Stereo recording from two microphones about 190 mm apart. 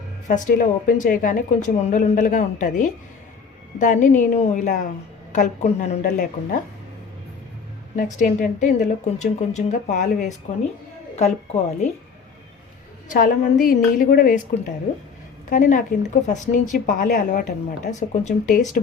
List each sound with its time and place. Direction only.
0.3 s a woman's voice: 40° left (ahead or behind)
7.9 s a woman's voice: 40° left (ahead or behind)
13.1 s speech: 45° left (ahead or behind)